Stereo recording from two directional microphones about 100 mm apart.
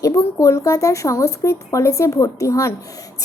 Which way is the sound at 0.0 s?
35° left (ahead or behind).